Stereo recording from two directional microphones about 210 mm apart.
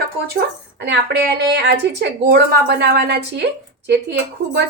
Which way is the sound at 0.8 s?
55° right (ahead or behind).